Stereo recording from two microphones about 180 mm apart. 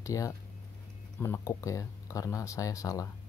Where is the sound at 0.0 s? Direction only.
20° left (ahead or behind).